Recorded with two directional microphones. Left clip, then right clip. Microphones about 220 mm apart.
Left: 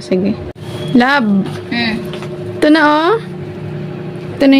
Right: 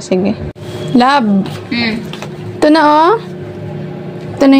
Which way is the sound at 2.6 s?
Centre (ahead or behind).